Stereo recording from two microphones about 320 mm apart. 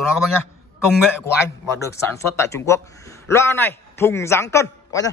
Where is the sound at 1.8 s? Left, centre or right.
Centre.